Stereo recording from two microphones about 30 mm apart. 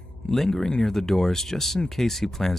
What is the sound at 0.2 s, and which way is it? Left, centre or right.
Speech, left.